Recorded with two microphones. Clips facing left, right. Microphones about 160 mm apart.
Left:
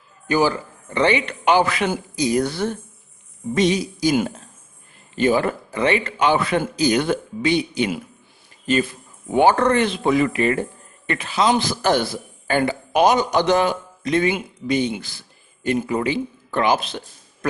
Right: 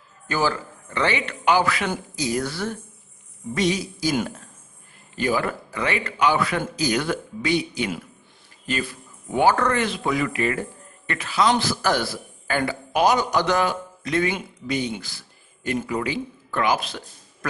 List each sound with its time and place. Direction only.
0.3 s speech: 15° left (ahead or behind)
9.3 s a man's voice: 20° left (ahead or behind)